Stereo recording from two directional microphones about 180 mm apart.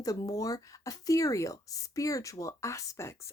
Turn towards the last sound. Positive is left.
turn(degrees=15)  # may be behind; listen again after turning